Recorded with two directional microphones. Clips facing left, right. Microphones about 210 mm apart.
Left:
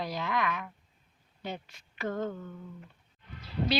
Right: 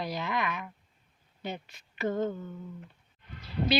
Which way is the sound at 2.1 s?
20° right (ahead or behind).